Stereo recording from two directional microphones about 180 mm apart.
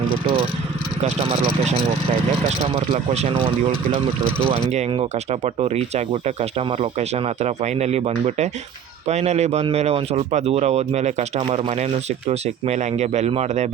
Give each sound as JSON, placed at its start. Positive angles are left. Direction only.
{"t": 1.0, "sound": "speech", "side_deg": -35}
{"t": 2.7, "sound": "speech", "side_deg": -35}
{"t": 4.7, "sound": "speech", "side_deg": -35}